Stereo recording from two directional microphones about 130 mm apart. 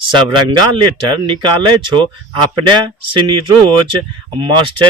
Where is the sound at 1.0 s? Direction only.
35° right (ahead or behind).